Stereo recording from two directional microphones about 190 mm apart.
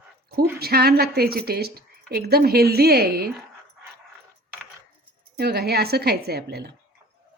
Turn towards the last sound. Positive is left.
turn(degrees=-60)  # may be behind; listen again after turning